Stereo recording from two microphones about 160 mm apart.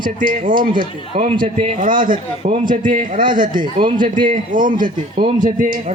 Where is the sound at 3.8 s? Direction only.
30° right (ahead or behind).